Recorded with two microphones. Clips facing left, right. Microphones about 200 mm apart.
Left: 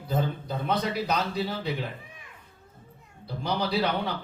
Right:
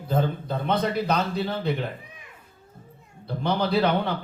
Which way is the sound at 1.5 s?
55° right (ahead or behind).